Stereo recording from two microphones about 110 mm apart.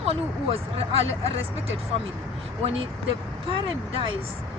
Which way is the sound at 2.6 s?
65° right (ahead or behind).